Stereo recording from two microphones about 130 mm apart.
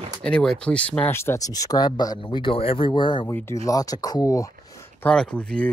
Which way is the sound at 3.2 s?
20° left (ahead or behind).